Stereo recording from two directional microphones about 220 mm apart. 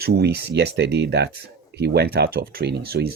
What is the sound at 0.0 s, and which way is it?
Speech, 50° right (ahead or behind).